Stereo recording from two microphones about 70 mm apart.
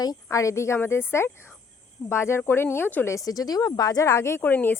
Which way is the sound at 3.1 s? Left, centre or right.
Left.